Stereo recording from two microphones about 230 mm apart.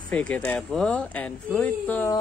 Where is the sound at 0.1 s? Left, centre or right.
Centre.